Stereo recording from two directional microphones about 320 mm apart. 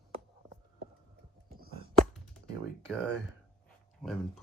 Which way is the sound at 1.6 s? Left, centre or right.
Centre.